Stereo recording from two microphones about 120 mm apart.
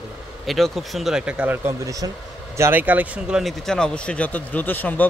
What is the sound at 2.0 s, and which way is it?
Speech, 30° right (ahead or behind).